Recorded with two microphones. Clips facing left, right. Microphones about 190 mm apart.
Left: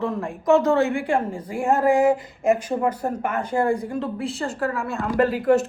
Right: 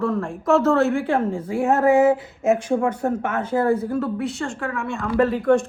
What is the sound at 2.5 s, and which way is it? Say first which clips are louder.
Speech: right 2 dB; 5° left (ahead or behind).